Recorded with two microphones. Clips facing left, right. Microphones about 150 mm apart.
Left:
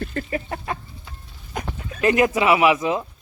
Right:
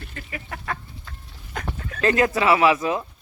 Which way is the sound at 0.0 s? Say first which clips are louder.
Left 12 dB; 50° left (ahead or behind).